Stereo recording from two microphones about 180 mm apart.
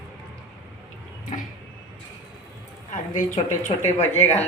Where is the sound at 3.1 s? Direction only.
45° left (ahead or behind).